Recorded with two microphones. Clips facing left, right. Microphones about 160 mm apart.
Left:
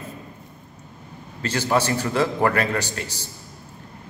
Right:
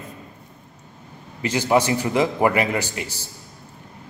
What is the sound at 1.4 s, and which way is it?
A man's voice, 15° right (ahead or behind).